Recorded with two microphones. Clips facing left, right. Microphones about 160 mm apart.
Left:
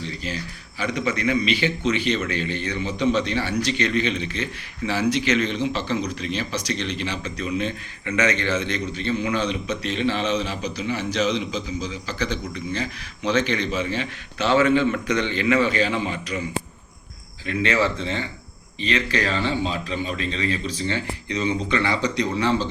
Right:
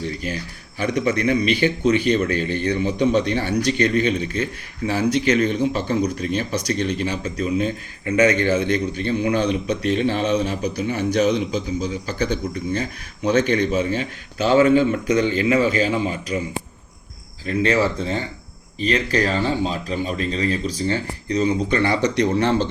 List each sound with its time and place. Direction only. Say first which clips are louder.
0.0 s a sound: right 4 dB; 50° right (ahead or behind)
1.2 s a man's voice: right 2 dB; 45° right (ahead or behind)
17.4 s a man's voice: right 3 dB; 40° right (ahead or behind)